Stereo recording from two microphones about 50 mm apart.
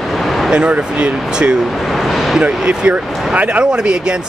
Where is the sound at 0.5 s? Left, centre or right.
Right.